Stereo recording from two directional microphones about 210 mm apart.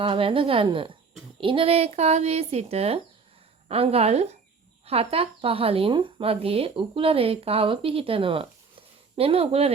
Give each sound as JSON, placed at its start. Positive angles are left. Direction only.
{"t": 0.0, "sound": "speech", "side_deg": -25}